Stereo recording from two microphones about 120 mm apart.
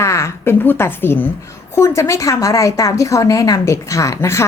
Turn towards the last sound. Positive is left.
turn(degrees=25)  # may be behind; listen again after turning